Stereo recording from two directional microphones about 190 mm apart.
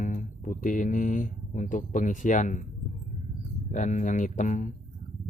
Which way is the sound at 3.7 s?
40° left (ahead or behind).